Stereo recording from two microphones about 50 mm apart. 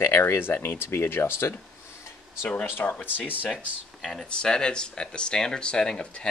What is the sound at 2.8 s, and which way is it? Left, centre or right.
Speech, left.